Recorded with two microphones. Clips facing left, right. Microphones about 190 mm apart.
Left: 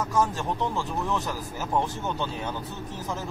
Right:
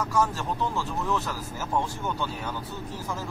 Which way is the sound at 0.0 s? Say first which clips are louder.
Left 1 dB; 20° left (ahead or behind).